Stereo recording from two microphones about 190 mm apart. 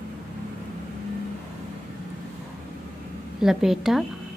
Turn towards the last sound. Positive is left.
turn(degrees=0)  # may be behind; listen again after turning